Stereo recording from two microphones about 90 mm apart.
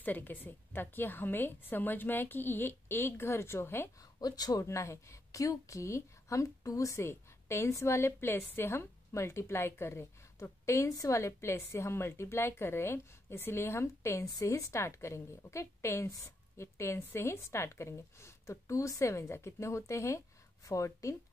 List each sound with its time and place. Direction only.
0.0 s a woman's voice: 20° left (ahead or behind)
4.2 s speech: 45° left (ahead or behind)
4.6 s speech: 35° left (ahead or behind)